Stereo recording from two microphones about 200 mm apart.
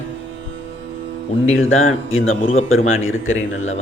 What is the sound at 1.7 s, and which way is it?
Speech, 85° left.